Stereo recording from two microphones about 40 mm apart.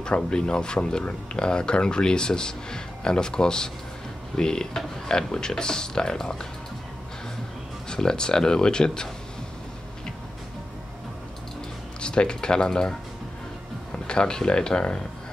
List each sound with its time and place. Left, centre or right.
0.0 s speech: left
7.9 s speech: centre
12.0 s speech: left
13.9 s speech: left